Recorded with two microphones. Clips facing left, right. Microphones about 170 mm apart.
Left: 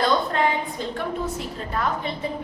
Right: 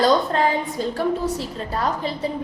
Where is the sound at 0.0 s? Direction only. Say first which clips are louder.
Right 3 dB; 35° right (ahead or behind).